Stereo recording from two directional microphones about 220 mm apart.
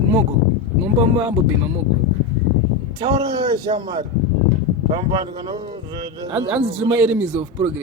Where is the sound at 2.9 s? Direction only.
20° right (ahead or behind).